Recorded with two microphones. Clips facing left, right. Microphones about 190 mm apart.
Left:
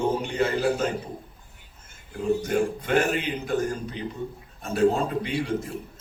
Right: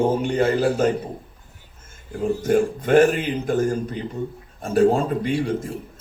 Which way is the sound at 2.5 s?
45° right (ahead or behind).